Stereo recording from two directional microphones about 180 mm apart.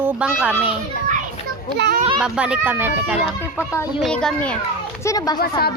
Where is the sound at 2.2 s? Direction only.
5° right (ahead or behind).